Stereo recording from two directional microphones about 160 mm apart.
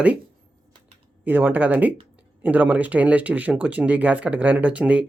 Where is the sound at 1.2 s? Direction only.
10° right (ahead or behind).